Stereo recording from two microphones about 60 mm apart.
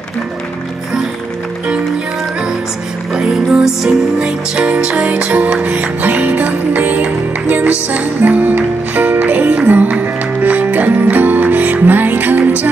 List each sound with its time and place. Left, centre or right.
3.2 s music: centre; by 12.6 s right